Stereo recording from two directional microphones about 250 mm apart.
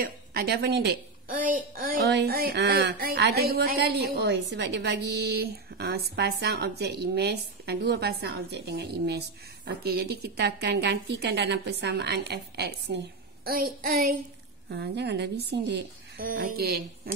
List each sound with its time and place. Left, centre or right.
0.3 s a woman's voice: right